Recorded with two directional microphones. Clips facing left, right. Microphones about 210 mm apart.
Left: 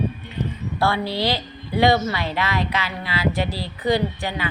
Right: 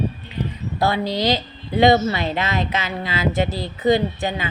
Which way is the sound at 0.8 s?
20° right (ahead or behind).